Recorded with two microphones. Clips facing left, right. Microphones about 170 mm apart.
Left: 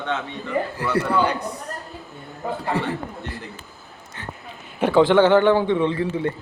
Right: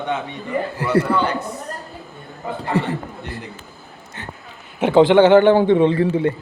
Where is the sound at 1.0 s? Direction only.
55° right (ahead or behind).